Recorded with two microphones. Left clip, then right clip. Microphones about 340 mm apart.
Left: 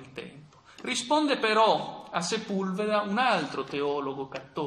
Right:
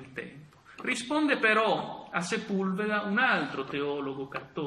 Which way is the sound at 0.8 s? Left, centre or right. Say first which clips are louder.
Left 3 dB; centre.